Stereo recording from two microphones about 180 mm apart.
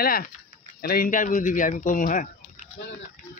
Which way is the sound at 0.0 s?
55° left (ahead or behind).